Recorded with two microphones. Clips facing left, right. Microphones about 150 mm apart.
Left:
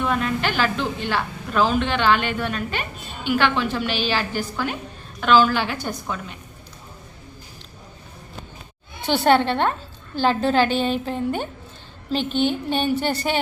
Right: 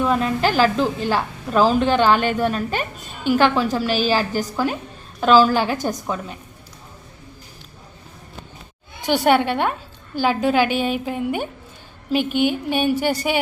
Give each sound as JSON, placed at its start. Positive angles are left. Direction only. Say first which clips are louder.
{"t": 0.0, "sound": "a woman's voice", "louder": "right 4 dB", "side_deg": -35}
{"t": 9.0, "sound": "a woman's voice", "louder": "right 1 dB", "side_deg": -10}